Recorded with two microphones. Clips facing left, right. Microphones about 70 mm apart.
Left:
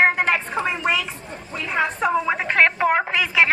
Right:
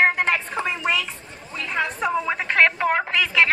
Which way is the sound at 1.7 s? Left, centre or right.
Centre.